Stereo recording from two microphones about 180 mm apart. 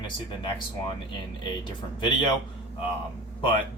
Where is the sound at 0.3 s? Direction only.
25° left (ahead or behind).